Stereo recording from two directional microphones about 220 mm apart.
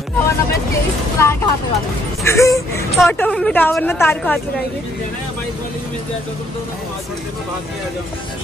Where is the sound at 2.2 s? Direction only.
15° left (ahead or behind).